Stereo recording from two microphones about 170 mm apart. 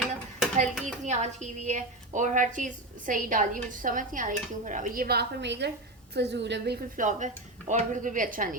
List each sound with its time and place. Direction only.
0.5 s a woman's voice: 45° right (ahead or behind); by 6.7 s 90° right
6.9 s speech: 50° right (ahead or behind)